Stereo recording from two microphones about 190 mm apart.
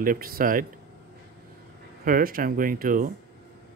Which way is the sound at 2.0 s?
50° right (ahead or behind).